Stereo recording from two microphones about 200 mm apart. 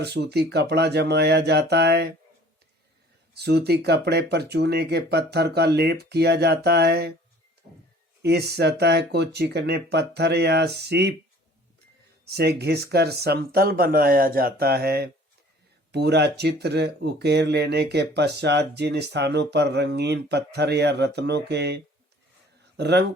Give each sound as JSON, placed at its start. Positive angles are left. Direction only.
{"t": 0.0, "sound": "speech", "side_deg": -55}
{"t": 3.3, "sound": "speech", "side_deg": -55}
{"t": 8.2, "sound": "speech", "side_deg": -55}
{"t": 12.2, "sound": "speech", "side_deg": -55}
{"t": 22.8, "sound": "speech", "side_deg": -55}